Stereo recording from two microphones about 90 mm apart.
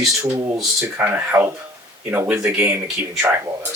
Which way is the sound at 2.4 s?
20° right (ahead or behind).